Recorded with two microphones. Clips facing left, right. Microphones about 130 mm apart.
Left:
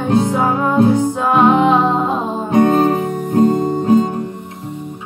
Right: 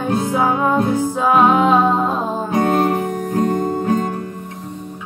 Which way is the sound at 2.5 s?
25° left (ahead or behind).